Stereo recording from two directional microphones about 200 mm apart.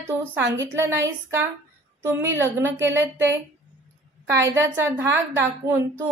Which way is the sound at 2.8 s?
65° right (ahead or behind).